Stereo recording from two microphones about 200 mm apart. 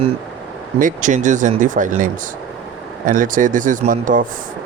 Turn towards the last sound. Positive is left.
turn(degrees=-40)  # may be behind; listen again after turning